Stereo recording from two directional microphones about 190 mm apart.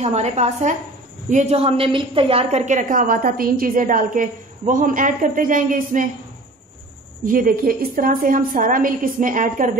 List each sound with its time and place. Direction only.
0.0 s a woman's voice: 35° right (ahead or behind)
7.2 s a woman's voice: 45° right (ahead or behind)